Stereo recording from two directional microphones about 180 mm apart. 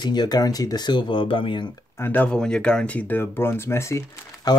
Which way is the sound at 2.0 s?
10° left (ahead or behind).